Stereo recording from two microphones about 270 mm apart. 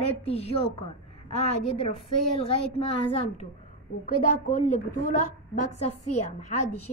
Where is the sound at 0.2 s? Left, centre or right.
Left.